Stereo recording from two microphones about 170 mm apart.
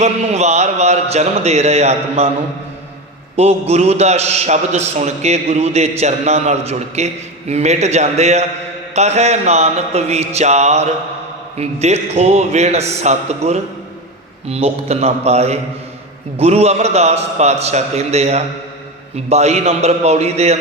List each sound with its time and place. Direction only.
0.0 s a man's voice: 40° right (ahead or behind)
3.3 s a man's voice: 40° right (ahead or behind)